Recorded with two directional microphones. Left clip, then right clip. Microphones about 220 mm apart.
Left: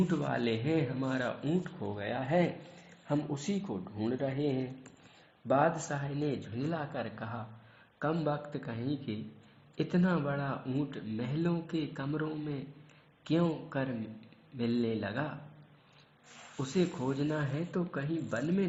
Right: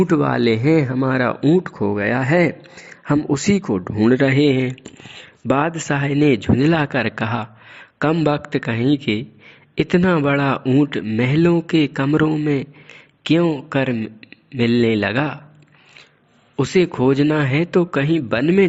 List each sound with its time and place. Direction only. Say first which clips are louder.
0.1 s a man's voice: right 16 dB; 50° right (ahead or behind)
16.6 s speech: right 17 dB; 60° right (ahead or behind); by 18.7 s 45° right (ahead or behind)